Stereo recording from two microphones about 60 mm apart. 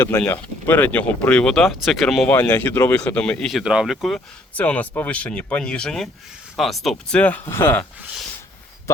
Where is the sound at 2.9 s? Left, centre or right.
Centre.